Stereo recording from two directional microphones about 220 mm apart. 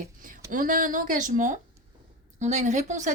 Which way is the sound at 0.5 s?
40° right (ahead or behind).